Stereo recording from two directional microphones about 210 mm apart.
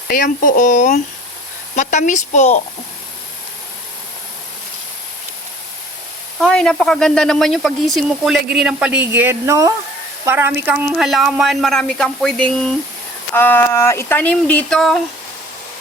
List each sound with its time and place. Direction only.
0.1 s speech: 40° left (ahead or behind)
6.4 s speech: 5° left (ahead or behind)